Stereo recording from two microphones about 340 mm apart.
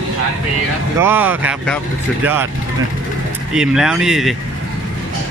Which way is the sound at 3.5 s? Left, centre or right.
Centre.